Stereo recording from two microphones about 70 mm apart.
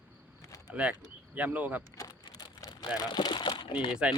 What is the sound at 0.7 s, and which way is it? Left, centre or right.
Speech, centre.